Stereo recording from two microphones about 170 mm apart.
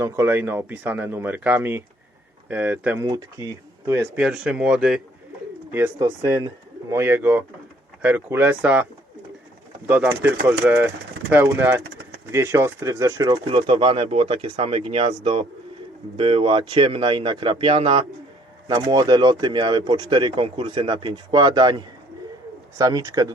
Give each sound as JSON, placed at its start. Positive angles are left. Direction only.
{"t": 0.0, "sound": "speech", "side_deg": -15}
{"t": 3.1, "sound": "speech", "side_deg": -20}
{"t": 5.7, "sound": "speech", "side_deg": -15}